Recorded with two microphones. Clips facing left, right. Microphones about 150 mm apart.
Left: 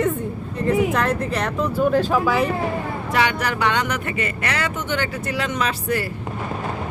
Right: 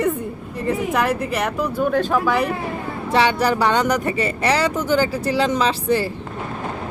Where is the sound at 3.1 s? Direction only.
30° right (ahead or behind).